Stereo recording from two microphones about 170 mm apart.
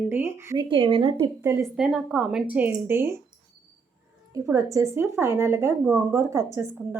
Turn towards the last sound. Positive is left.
turn(degrees=-15)  # may be behind; listen again after turning